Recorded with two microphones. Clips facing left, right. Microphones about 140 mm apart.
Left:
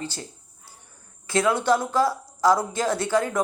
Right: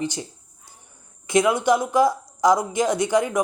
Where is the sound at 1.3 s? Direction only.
15° right (ahead or behind).